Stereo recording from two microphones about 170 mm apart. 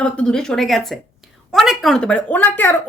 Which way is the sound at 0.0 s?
5° left (ahead or behind).